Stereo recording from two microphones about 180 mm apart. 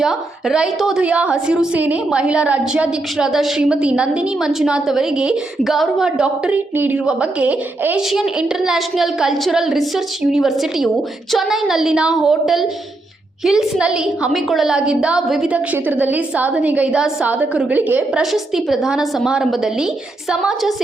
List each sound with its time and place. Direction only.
0.0 s a woman's voice: centre (ahead or behind)